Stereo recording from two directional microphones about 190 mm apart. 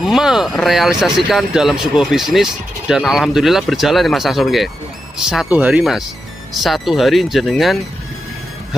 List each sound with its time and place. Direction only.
0.0 s speech: centre (ahead or behind)